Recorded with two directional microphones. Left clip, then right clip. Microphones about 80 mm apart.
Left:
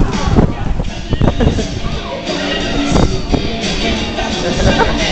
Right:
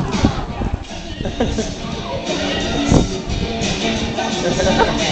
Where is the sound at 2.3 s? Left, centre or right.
Left.